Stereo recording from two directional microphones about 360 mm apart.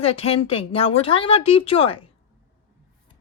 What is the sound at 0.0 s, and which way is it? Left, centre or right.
Speech, centre.